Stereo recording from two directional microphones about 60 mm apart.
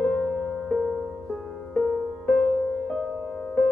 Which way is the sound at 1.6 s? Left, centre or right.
Left.